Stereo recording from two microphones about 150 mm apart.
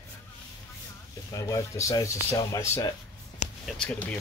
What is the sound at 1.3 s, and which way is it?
Speech, 20° left (ahead or behind).